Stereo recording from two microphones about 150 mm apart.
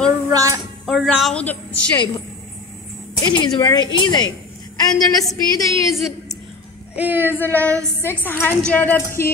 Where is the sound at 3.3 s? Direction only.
30° left (ahead or behind).